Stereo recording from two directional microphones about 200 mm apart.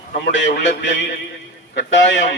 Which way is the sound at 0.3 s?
65° left (ahead or behind).